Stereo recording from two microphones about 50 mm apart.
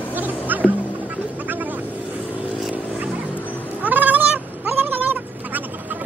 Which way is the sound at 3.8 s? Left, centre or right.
Right.